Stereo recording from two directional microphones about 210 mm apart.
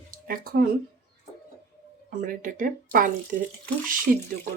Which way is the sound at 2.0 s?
40° right (ahead or behind).